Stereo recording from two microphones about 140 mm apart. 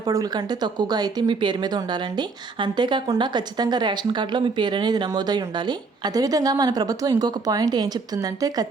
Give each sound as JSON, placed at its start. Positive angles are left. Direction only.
{"t": 0.0, "sound": "speech", "side_deg": -25}